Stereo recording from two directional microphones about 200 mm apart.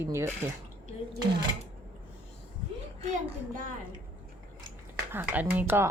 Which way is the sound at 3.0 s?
35° right (ahead or behind).